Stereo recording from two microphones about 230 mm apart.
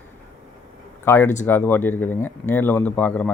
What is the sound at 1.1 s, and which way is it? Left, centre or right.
Speech, centre.